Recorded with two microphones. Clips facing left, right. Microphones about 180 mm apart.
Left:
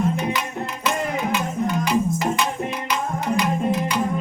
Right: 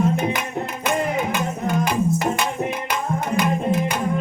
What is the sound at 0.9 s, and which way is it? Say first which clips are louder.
Music: right 1 dB; 50° right (ahead or behind).